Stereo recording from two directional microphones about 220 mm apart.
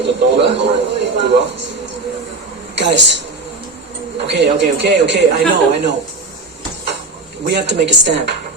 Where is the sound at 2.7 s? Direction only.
50° right (ahead or behind).